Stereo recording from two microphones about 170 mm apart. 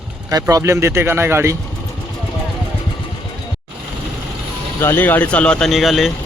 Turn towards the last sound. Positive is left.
turn(degrees=0)  # may be behind; listen again after turning